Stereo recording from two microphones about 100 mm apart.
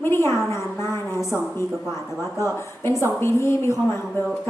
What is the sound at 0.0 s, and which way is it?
A woman's voice, 25° left (ahead or behind).